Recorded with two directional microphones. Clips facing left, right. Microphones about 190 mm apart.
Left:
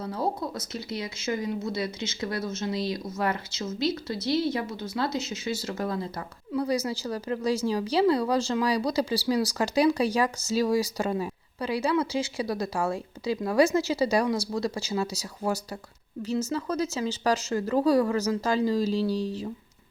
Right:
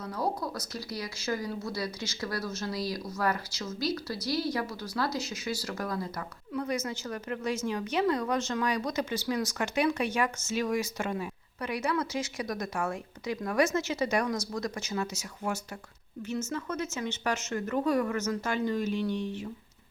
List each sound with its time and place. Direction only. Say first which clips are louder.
0.0 s speech: left 3 dB; 25° left (ahead or behind)